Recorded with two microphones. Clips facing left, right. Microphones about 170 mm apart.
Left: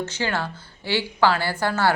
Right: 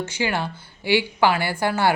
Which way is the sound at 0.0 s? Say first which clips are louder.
Right 1 dB; 10° right (ahead or behind).